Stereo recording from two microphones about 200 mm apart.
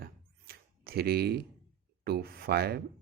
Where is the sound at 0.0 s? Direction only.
50° right (ahead or behind).